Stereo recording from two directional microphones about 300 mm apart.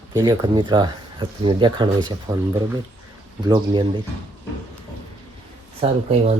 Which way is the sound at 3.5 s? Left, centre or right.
Centre.